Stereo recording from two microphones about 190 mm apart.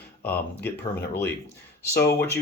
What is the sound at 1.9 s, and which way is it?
Speech, 55° left (ahead or behind).